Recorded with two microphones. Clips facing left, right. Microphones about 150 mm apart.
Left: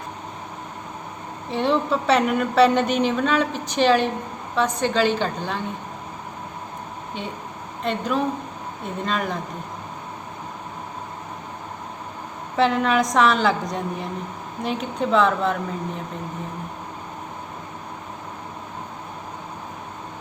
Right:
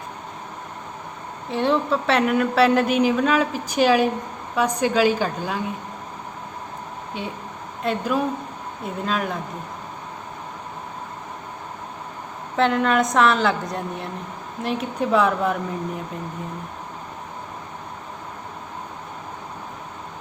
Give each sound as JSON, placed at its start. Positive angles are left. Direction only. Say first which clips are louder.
{"t": 1.5, "sound": "a woman's voice", "louder": "even", "side_deg": 0}
{"t": 7.9, "sound": "a woman's voice", "louder": "right 1 dB", "side_deg": -5}
{"t": 12.5, "sound": "a woman's voice", "louder": "even", "side_deg": 0}